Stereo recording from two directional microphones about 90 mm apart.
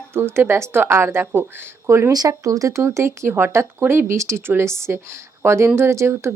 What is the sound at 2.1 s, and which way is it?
Speech, 45° right (ahead or behind).